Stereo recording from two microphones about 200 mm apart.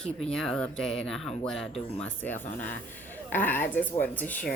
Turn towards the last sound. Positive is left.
turn(degrees=10)  # may be behind; listen again after turning